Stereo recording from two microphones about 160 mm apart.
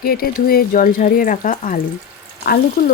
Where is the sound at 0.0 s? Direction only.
70° left (ahead or behind); by 1.8 s 55° left (ahead or behind).